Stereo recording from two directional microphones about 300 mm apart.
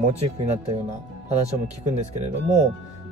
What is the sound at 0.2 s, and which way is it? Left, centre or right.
Speech, right.